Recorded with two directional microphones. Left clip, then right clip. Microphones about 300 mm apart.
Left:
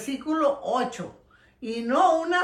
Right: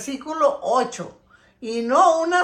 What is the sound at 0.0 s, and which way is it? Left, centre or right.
A woman's voice, centre.